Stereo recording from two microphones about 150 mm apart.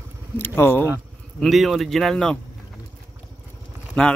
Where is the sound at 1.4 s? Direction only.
Centre (ahead or behind).